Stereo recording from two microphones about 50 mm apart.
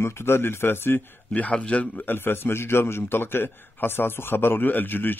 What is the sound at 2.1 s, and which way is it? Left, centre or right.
A man's voice, left.